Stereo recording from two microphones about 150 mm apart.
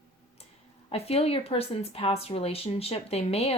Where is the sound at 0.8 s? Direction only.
40° left (ahead or behind).